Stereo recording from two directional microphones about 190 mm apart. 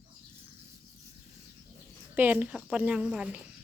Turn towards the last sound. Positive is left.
turn(degrees=-5)  # may be behind; listen again after turning